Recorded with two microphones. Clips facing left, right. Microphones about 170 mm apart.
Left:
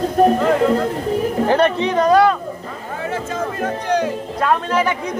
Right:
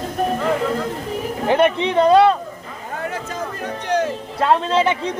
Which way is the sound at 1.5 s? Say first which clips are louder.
Right 2 dB; 15° right (ahead or behind).